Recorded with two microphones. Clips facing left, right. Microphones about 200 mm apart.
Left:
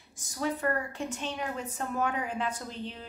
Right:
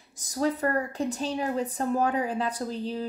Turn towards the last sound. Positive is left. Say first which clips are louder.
# right 8 dB
turn(degrees=-35)  # may be behind; listen again after turning